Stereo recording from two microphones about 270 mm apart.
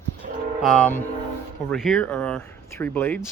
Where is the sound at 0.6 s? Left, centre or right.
Centre.